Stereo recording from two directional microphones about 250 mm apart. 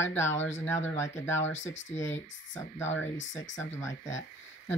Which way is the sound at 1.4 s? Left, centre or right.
Left.